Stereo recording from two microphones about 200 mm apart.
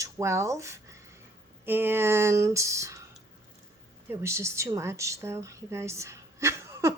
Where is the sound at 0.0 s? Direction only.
15° right (ahead or behind).